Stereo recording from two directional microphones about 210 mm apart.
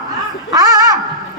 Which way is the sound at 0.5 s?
15° right (ahead or behind).